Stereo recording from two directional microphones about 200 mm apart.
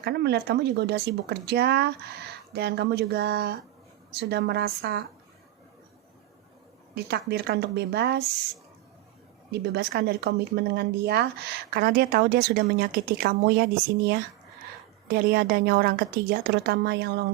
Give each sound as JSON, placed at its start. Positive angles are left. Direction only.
{"t": 0.0, "sound": "speech", "side_deg": -55}
{"t": 6.9, "sound": "speech", "side_deg": -55}
{"t": 9.5, "sound": "speech", "side_deg": -55}